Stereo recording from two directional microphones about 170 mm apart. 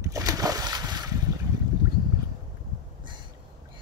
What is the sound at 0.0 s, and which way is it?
Splash, 20° right (ahead or behind).